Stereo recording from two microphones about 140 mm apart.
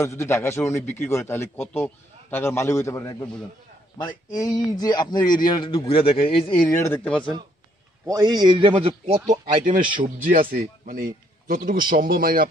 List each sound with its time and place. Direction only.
0.0 s a man's voice: 20° left (ahead or behind); by 6.6 s 40° left (ahead or behind)
6.7 s a man's voice: 20° left (ahead or behind)
7.1 s speech: 5° left (ahead or behind)
8.1 s a man's voice: 30° right (ahead or behind); by 9.2 s 45° right (ahead or behind)
9.3 s a man's voice: 65° right (ahead or behind); by 12.4 s 90° right